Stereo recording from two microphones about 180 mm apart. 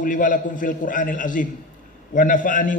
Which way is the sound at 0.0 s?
45° left (ahead or behind).